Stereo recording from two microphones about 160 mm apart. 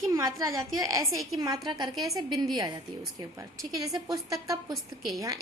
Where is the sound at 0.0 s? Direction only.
20° right (ahead or behind).